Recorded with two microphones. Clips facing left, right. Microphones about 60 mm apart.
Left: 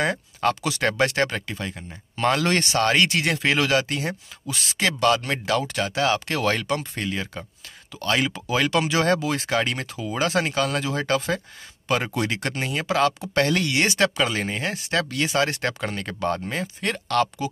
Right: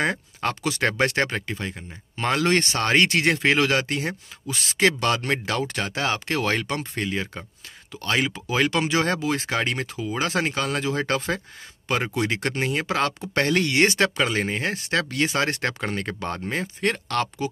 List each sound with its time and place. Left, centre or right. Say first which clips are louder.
0.0 s speech: left 2 dB; right
3.1 s speech: right 2 dB; right
7.1 s speech: right 1 dB; right
8.5 s speech: left 1 dB; right